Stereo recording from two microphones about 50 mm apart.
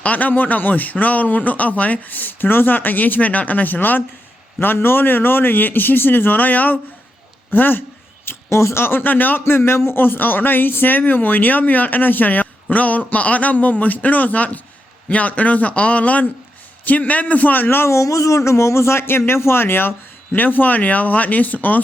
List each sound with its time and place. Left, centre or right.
0.0 s a man's voice: left
9.4 s a man's voice: left
17.8 s speech: left